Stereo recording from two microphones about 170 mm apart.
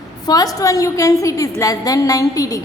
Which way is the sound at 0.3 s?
20° left (ahead or behind).